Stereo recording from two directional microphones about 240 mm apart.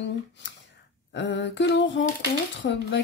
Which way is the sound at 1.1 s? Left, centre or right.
Left.